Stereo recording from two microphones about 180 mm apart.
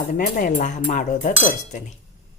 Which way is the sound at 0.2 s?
45° left (ahead or behind).